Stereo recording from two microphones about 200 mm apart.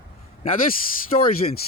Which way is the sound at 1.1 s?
30° left (ahead or behind).